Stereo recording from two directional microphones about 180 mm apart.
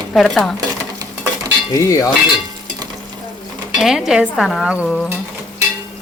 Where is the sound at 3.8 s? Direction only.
Centre (ahead or behind).